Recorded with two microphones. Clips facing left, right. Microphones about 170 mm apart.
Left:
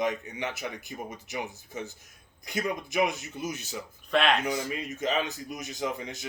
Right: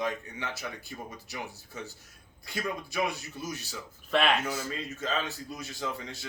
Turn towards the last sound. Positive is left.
turn(degrees=15)  # may be behind; listen again after turning